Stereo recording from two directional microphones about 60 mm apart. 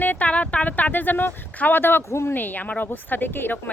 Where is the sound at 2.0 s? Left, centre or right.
Left.